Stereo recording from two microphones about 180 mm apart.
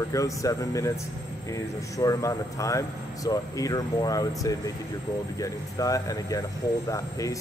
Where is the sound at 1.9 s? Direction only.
20° left (ahead or behind).